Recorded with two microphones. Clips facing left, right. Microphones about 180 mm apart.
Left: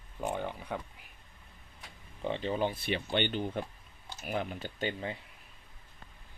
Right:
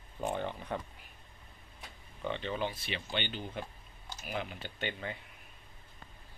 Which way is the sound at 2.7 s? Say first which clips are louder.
Left 6 dB; 55° left (ahead or behind).